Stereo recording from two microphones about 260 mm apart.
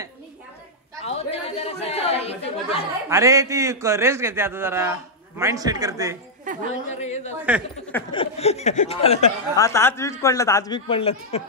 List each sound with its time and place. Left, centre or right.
1.0 s chatter: left
3.1 s a man's voice: centre
6.5 s speech: right
6.9 s speech: left
9.7 s a man's voice: centre